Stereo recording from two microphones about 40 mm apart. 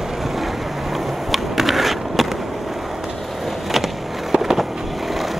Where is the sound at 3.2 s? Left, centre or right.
Centre.